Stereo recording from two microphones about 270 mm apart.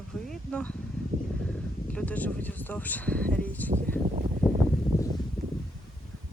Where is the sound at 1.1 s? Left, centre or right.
Right.